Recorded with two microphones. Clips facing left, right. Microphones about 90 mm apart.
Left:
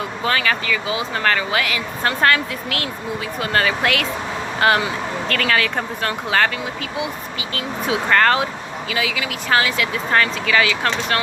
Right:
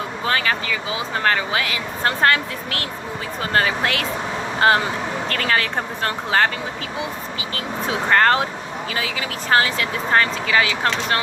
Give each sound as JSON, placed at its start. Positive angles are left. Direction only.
{"t": 0.3, "sound": "speech", "side_deg": -25}
{"t": 5.3, "sound": "speech", "side_deg": -30}
{"t": 7.5, "sound": "speech", "side_deg": -30}